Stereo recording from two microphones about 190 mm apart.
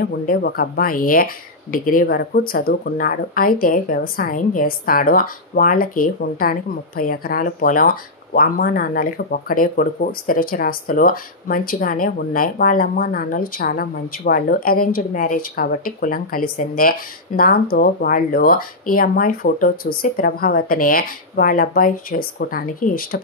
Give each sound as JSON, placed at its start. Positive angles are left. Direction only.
{"t": 0.3, "sound": "speech", "side_deg": 50}